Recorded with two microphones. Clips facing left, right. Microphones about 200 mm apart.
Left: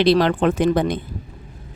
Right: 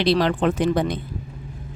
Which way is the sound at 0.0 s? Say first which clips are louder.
Left 3 dB; 55° left (ahead or behind).